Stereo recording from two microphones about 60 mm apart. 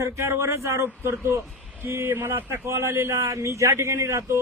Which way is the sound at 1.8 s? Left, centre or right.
Right.